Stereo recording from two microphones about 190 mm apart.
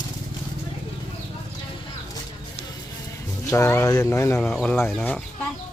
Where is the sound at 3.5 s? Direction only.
15° left (ahead or behind).